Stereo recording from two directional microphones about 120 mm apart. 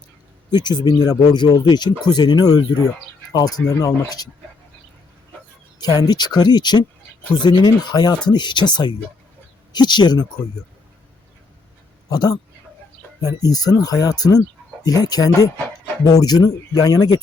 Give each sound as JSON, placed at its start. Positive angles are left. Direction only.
{"t": 0.5, "sound": "speech", "side_deg": 35}
{"t": 5.8, "sound": "speech", "side_deg": 35}
{"t": 12.1, "sound": "speech", "side_deg": 35}